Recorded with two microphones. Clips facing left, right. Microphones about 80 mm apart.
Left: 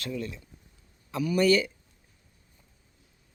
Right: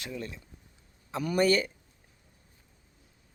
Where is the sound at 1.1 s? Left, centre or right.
Right.